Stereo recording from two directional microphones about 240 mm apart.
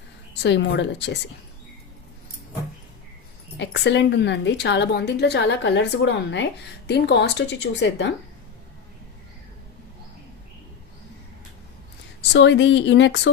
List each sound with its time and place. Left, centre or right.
0.4 s a woman's voice: left
3.6 s a woman's voice: left
12.3 s a woman's voice: left